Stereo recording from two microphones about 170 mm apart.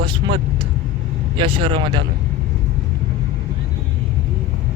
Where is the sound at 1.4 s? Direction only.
30° right (ahead or behind).